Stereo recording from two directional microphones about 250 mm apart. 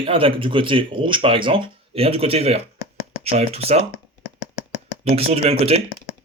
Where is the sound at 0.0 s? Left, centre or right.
Right.